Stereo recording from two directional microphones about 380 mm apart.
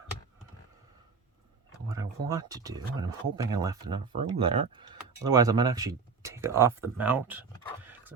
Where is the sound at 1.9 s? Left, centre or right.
Centre.